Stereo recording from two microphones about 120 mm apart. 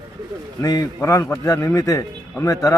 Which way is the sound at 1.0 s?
20° left (ahead or behind).